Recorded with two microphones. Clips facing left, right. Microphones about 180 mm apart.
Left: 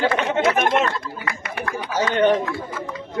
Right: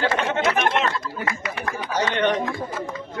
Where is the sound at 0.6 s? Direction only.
55° left (ahead or behind).